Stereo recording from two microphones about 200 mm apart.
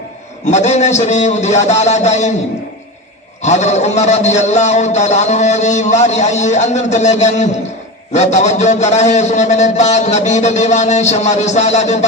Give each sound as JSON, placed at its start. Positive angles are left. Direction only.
{"t": 0.5, "sound": "a man's voice", "side_deg": 35}
{"t": 3.4, "sound": "a man's voice", "side_deg": 35}